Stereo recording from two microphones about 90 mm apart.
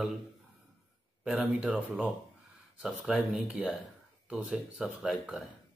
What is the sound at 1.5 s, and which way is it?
Speech, 15° right (ahead or behind).